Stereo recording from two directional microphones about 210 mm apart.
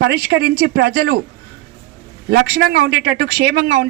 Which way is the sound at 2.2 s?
50° right (ahead or behind).